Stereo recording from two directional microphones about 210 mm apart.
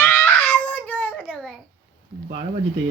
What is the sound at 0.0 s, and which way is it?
Crying, 10° left (ahead or behind).